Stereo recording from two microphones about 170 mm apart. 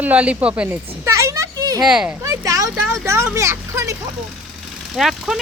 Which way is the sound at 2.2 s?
20° right (ahead or behind).